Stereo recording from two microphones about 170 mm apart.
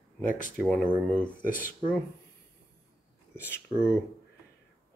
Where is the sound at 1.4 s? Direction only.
55° left (ahead or behind).